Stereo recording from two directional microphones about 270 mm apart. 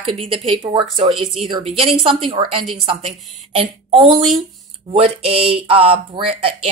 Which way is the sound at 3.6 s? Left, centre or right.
Centre.